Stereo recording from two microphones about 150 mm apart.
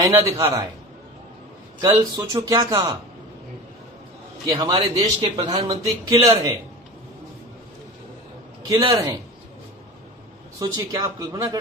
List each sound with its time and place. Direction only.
0.1 s a man's voice: 20° right (ahead or behind)
1.8 s a man's voice: 30° right (ahead or behind)
4.4 s a man's voice: 30° right (ahead or behind)
8.6 s a man's voice: 25° right (ahead or behind)
10.6 s a man's voice: 20° right (ahead or behind)